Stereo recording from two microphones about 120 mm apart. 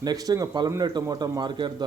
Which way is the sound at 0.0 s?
35° right (ahead or behind).